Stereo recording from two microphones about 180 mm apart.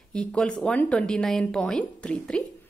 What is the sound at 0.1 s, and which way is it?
A woman's voice, 5° left (ahead or behind).